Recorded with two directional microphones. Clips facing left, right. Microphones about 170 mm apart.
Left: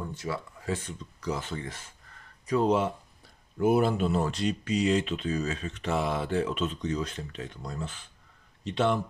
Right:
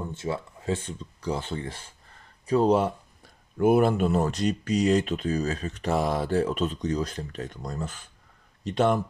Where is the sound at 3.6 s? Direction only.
55° right (ahead or behind).